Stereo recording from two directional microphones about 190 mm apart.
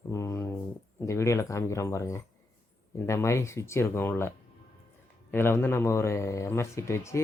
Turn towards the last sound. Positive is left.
turn(degrees=15)  # may be behind; listen again after turning